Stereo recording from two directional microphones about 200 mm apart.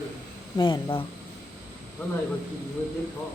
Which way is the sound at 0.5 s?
25° left (ahead or behind).